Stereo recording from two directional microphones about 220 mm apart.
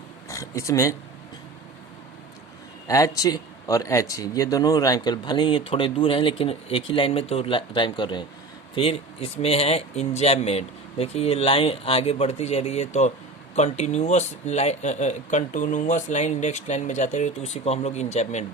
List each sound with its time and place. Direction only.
0.3 s speech: 15° left (ahead or behind)
2.8 s speech: 15° left (ahead or behind); by 18.4 s 30° left (ahead or behind)